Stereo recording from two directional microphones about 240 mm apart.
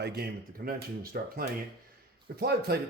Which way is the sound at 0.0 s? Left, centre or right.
Right.